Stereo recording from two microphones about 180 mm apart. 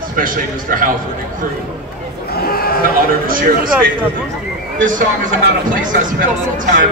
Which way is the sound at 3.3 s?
50° right (ahead or behind).